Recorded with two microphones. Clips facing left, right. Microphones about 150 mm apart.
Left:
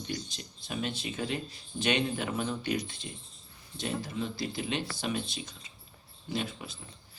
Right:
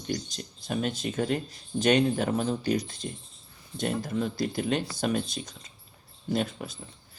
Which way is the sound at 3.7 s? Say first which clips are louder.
Right 5 dB; 50° right (ahead or behind).